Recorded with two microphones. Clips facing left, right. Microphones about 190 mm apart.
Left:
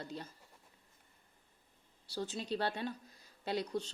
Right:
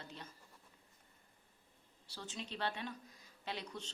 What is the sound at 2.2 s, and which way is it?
A woman's voice, 35° left (ahead or behind).